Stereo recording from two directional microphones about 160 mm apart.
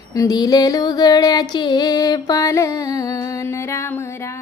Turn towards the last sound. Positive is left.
turn(degrees=15)  # may be behind; listen again after turning